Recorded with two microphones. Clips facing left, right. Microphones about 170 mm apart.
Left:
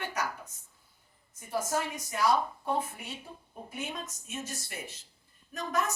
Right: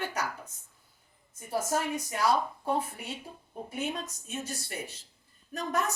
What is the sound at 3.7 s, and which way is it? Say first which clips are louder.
Speech: right 4 dB; 35° right (ahead or behind).